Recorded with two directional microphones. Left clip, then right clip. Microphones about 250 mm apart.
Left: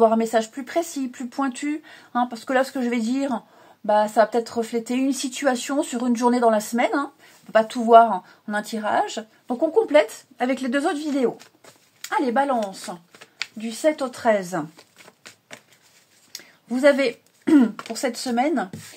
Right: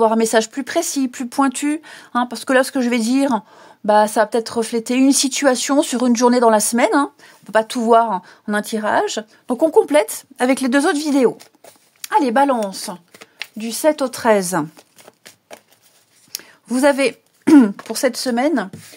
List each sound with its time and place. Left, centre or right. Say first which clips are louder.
0.0 s speech: right 3 dB; right
16.3 s throat clearing: right 5 dB; right
17.8 s speech: right 7 dB; right